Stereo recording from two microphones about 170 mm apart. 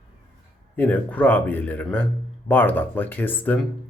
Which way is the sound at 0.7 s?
10° left (ahead or behind).